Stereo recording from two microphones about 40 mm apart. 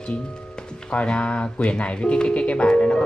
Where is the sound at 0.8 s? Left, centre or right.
Left.